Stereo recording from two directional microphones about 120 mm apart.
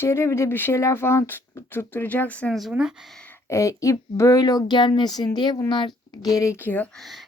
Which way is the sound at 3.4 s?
25° left (ahead or behind).